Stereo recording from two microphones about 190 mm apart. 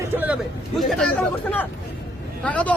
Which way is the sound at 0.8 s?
Centre (ahead or behind).